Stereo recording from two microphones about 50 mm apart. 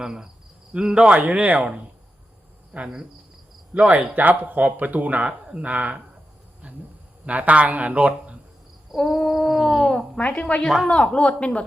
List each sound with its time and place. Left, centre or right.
0.0 s cricket: centre
0.7 s speech: centre
1.3 s speech: right
2.7 s speech: right
5.5 s speech: right
5.7 s speech: right
7.3 s speech: right
9.0 s a sound: centre
9.8 s speech: centre
10.3 s speech: left